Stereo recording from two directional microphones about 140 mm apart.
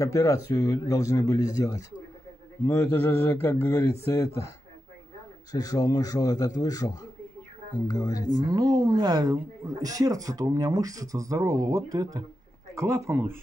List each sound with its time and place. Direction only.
0.0 s a man's voice: 20° left (ahead or behind)
5.5 s a man's voice: 25° left (ahead or behind)
8.5 s speech: 30° right (ahead or behind)